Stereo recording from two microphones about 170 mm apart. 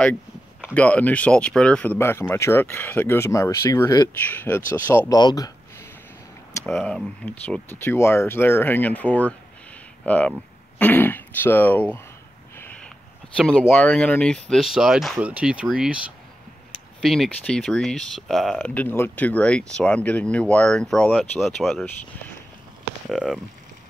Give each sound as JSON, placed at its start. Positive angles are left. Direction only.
{"t": 0.7, "sound": "speech", "side_deg": 10}
{"t": 5.2, "sound": "a sound", "side_deg": 20}
{"t": 6.8, "sound": "speech", "side_deg": 0}
{"t": 7.2, "sound": "speech", "side_deg": 10}
{"t": 12.5, "sound": "a sound", "side_deg": 10}
{"t": 13.4, "sound": "speech", "side_deg": 5}
{"t": 17.0, "sound": "speech", "side_deg": 0}
{"t": 23.0, "sound": "speech", "side_deg": 0}